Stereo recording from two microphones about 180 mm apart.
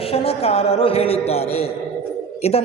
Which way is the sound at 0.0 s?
35° left (ahead or behind).